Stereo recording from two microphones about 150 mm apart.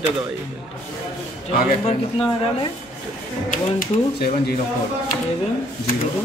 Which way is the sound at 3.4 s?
65° left (ahead or behind).